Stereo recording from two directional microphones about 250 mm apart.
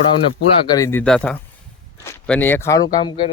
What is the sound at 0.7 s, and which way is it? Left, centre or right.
Speech, centre.